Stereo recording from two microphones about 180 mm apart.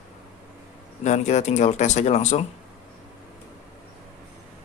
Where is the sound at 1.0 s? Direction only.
40° left (ahead or behind).